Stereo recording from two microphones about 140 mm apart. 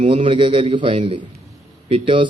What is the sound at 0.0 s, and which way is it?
Speech, 40° right (ahead or behind).